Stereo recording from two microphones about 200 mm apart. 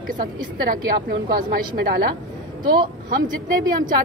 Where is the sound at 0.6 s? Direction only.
45° right (ahead or behind).